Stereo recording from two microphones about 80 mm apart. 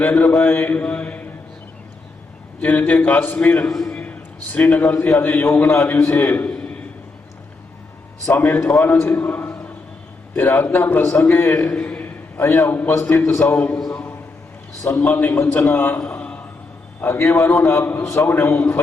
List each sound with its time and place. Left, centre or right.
0.0 s mantra: left
2.6 s mantra: centre
8.3 s mantra: left
9.0 s a man's voice: left
10.3 s mantra: left
11.0 s a man's voice: left
11.7 s a sound: centre
12.4 s mantra: left
12.9 s a man's voice: left
13.3 s mantra: left
13.9 s a sound: left
14.8 s mantra: left
16.0 s a sound: left
17.0 s mantra: left